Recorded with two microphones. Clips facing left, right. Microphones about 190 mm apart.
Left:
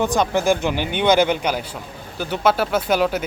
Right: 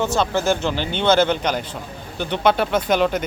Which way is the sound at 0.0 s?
15° left (ahead or behind).